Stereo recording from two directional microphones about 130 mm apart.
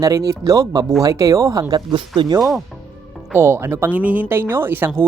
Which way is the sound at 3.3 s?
20° right (ahead or behind).